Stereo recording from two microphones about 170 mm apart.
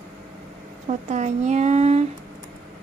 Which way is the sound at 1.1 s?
45° right (ahead or behind).